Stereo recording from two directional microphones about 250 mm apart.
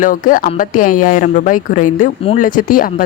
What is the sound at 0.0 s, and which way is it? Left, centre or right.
Speech, left.